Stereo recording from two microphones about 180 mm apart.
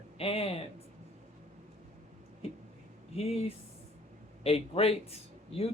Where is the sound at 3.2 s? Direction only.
35° left (ahead or behind).